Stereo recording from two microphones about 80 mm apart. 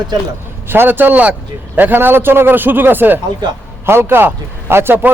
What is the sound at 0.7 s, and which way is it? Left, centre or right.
A man's voice, right.